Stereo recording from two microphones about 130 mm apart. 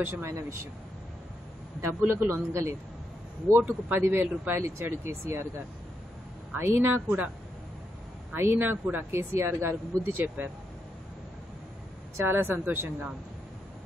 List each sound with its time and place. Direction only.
0.0 s a man's voice: 20° right (ahead or behind)
1.8 s a man's voice: 20° right (ahead or behind)
6.5 s a woman's voice: 15° right (ahead or behind)
8.3 s a woman's voice: 15° right (ahead or behind)
12.3 s a woman's voice: 15° right (ahead or behind)